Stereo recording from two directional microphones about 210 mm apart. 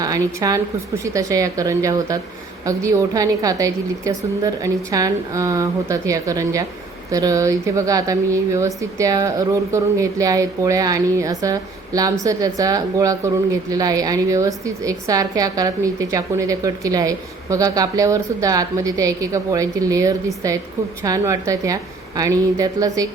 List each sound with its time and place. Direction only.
0.0 s speech: 15° right (ahead or behind)